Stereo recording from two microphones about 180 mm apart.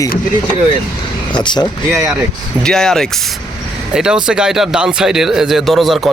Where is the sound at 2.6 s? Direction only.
5° left (ahead or behind).